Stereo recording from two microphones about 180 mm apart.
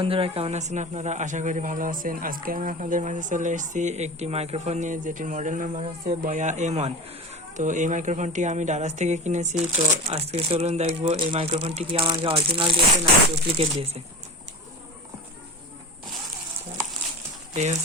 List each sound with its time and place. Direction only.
0.0 s speech: 30° right (ahead or behind)
17.5 s speech: 40° right (ahead or behind)